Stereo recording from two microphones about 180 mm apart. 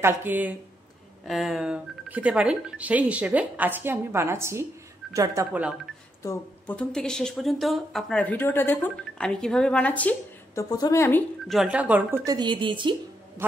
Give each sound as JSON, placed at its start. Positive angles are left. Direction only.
{"t": 0.0, "sound": "speech", "side_deg": -10}
{"t": 6.2, "sound": "speech", "side_deg": 10}
{"t": 11.4, "sound": "speech", "side_deg": 0}
{"t": 12.3, "sound": "a woman's voice", "side_deg": -25}